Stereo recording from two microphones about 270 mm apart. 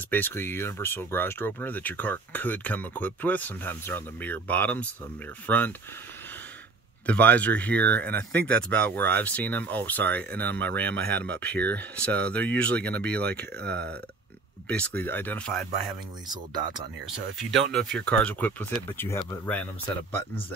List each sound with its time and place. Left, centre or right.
0.1 s speech: centre
7.1 s speech: centre
11.1 s speech: right
11.3 s speech: centre
13.7 s speech: right
14.7 s speech: centre
17.0 s speech: centre